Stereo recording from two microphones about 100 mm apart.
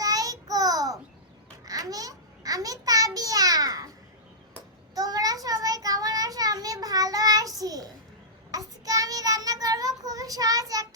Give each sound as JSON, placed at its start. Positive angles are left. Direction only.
{"t": 0.0, "sound": "child singing", "side_deg": -35}
{"t": 1.6, "sound": "babbling", "side_deg": -35}
{"t": 4.9, "sound": "child singing", "side_deg": -40}